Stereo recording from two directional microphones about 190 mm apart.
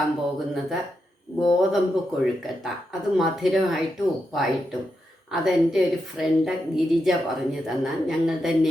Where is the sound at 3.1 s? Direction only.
Centre (ahead or behind).